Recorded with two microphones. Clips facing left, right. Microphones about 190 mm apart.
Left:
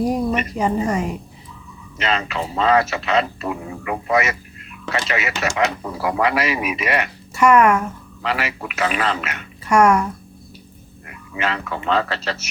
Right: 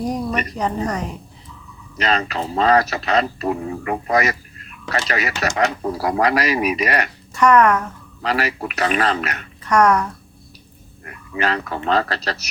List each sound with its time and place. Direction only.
0.1 s a woman's voice: 5° left (ahead or behind)
2.0 s speech: 40° right (ahead or behind)
7.3 s a woman's voice: 10° left (ahead or behind)
8.2 s speech: 40° right (ahead or behind)
9.6 s a woman's voice: 10° left (ahead or behind)
11.0 s speech: 40° right (ahead or behind)